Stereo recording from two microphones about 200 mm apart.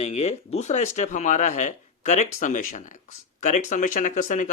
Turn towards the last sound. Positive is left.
turn(degrees=40)  # may be behind; listen again after turning